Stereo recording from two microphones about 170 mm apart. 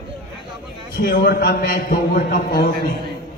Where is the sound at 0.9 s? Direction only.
65° left (ahead or behind).